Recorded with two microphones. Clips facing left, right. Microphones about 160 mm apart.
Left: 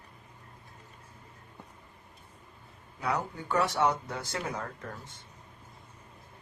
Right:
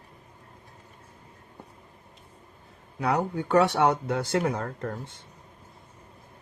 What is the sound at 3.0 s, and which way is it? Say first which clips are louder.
Speech: right 6 dB; 65° right (ahead or behind).